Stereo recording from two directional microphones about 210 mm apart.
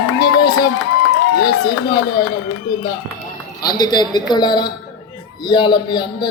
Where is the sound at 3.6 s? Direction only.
20° left (ahead or behind).